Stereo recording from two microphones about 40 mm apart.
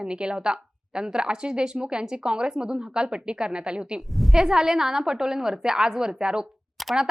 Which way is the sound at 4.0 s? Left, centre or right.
Centre.